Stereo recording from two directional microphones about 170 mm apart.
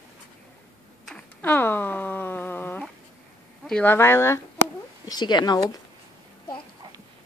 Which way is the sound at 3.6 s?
5° left (ahead or behind).